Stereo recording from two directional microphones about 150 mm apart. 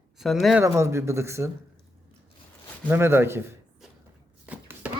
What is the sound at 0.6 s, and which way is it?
Speech, 20° right (ahead or behind).